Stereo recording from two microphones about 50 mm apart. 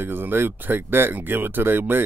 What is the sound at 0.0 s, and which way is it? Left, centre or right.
Speech, right.